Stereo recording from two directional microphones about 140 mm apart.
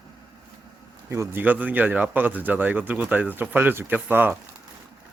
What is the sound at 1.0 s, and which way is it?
A man's voice, 20° right (ahead or behind).